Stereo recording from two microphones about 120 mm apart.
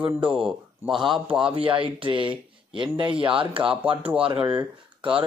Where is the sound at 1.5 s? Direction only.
45° right (ahead or behind).